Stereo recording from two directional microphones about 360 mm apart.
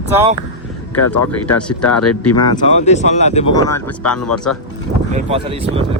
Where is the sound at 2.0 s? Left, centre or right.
Left.